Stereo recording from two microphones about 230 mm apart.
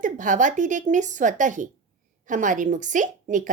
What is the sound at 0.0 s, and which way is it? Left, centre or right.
Speech, right.